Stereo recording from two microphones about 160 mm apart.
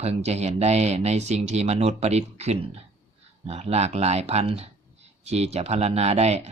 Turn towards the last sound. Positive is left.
turn(degrees=-40)  # may be behind; listen again after turning